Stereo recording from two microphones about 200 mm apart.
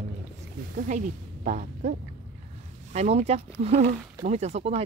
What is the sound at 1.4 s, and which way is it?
Speech, 40° right (ahead or behind).